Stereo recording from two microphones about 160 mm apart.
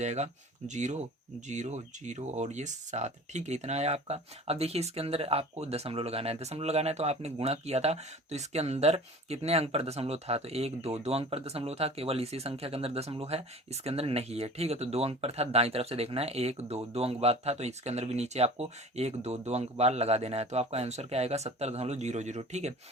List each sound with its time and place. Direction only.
0.0 s speech: 45° right (ahead or behind)